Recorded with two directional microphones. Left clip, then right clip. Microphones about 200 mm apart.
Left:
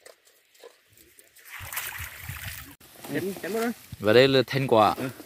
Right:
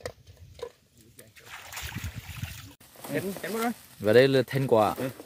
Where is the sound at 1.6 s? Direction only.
30° right (ahead or behind).